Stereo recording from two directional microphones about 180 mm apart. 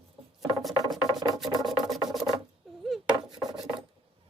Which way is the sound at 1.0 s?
20° right (ahead or behind).